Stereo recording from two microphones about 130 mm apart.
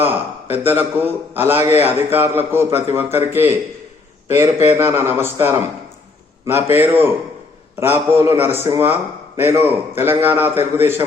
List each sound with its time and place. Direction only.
0.5 s a man's voice: 15° right (ahead or behind)